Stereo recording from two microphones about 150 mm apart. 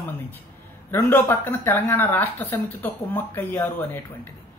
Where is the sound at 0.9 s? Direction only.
15° left (ahead or behind).